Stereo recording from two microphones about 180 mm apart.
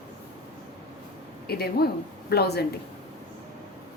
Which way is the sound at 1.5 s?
60° left (ahead or behind).